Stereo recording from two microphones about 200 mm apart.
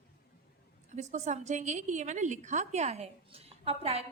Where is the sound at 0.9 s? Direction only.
35° right (ahead or behind).